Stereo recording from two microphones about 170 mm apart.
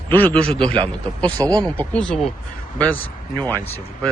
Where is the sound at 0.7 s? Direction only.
25° right (ahead or behind).